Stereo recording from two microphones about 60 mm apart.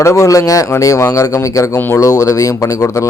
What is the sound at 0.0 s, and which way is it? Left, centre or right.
Speech, left.